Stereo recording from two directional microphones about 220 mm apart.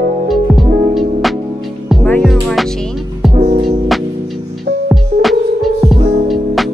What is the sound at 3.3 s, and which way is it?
Music, 30° right (ahead or behind).